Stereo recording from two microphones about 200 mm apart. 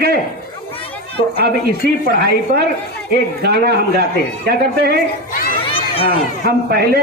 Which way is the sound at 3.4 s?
55° right (ahead or behind).